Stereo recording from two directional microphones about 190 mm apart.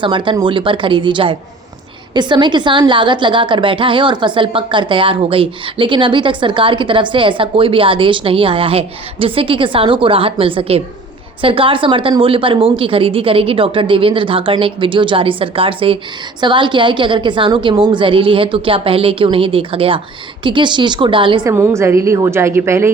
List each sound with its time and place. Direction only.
0.0 s a woman's voice: 25° right (ahead or behind)
21.5 s a woman's voice: 15° right (ahead or behind)